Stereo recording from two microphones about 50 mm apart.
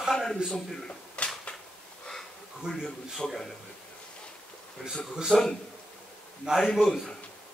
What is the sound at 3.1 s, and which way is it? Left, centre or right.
Speech, centre.